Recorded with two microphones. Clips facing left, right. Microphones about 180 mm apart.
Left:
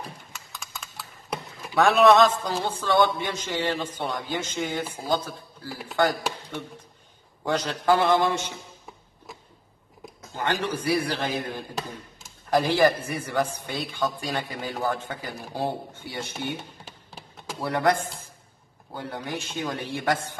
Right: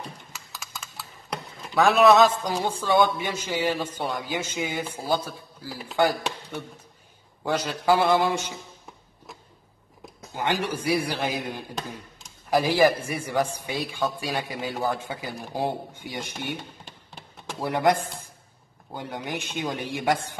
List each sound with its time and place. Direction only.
0.3 s a man's voice: centre (ahead or behind)
10.3 s a man's voice: 15° right (ahead or behind)
16.8 s tap: centre (ahead or behind)
17.6 s a man's voice: 15° right (ahead or behind)
18.9 s a man's voice: 15° right (ahead or behind)